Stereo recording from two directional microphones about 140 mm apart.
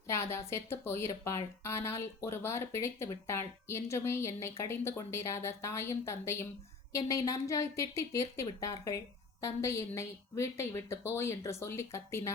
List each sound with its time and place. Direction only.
0.1 s speech: 20° left (ahead or behind)